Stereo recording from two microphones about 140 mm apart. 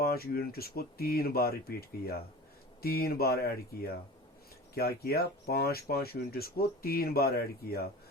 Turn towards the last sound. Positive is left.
turn(degrees=90)